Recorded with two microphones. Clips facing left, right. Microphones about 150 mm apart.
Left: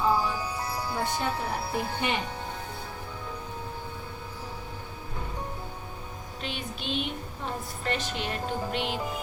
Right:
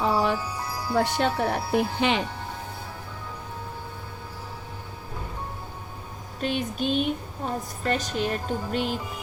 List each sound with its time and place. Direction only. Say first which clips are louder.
0.0 s wind chime: right 3 dB; 75° right (ahead or behind)
0.9 s speech: right 8 dB; 75° right (ahead or behind)
6.4 s a woman's voice: right 10 dB; 45° right (ahead or behind)